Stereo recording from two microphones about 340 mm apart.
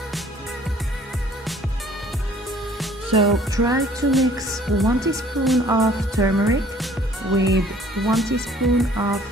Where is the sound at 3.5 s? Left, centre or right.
Centre.